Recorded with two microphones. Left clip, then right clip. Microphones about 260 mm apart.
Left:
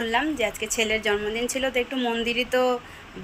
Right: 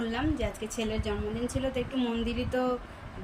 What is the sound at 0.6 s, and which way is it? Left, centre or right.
Speech, left.